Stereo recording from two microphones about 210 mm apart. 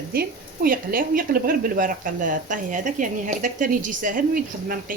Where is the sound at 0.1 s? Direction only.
45° right (ahead or behind).